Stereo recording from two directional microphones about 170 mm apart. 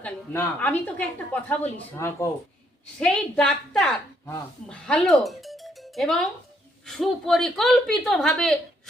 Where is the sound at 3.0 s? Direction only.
5° left (ahead or behind).